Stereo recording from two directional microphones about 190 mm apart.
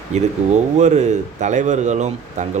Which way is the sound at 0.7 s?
40° right (ahead or behind).